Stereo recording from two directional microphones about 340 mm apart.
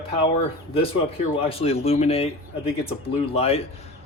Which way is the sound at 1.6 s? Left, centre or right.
Centre.